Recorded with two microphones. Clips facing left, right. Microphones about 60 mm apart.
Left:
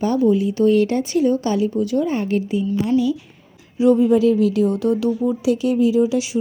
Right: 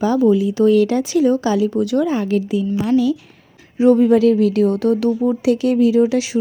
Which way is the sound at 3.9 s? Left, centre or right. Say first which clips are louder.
Right 2 dB; right.